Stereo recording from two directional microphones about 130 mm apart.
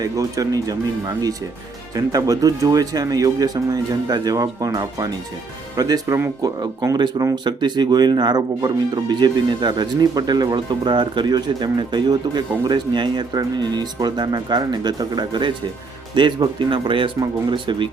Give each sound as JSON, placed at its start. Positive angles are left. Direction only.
{"t": 0.0, "sound": "speech", "side_deg": -25}
{"t": 6.6, "sound": "speech", "side_deg": -35}